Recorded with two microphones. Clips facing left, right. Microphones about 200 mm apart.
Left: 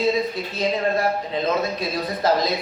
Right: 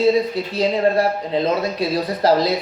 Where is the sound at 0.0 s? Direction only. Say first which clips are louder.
Right 5 dB; 35° right (ahead or behind).